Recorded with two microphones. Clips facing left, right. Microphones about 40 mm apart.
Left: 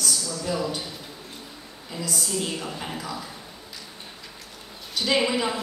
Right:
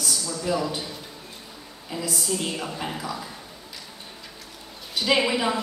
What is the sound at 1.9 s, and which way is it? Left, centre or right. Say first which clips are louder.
Speech: right 2 dB; centre.